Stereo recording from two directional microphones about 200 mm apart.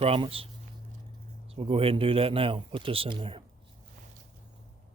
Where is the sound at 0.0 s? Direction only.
30° right (ahead or behind).